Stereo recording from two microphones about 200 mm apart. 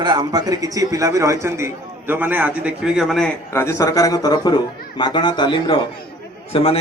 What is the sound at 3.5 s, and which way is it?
A man's voice, 15° left (ahead or behind).